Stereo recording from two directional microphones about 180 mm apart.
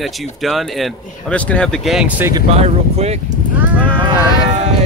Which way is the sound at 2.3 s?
35° right (ahead or behind).